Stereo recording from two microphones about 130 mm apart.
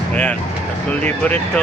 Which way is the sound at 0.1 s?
15° left (ahead or behind).